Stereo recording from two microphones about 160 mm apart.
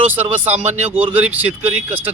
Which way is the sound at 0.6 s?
45° right (ahead or behind).